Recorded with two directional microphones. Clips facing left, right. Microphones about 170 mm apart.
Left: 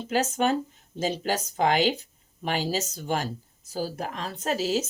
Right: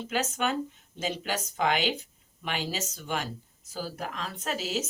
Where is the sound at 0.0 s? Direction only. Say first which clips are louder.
Left 5 dB; 35° left (ahead or behind).